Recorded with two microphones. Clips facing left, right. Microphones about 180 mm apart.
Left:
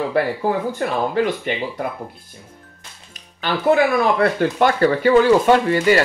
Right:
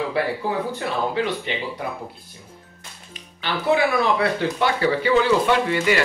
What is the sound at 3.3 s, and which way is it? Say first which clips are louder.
Speech: left 4 dB; 45° left (ahead or behind).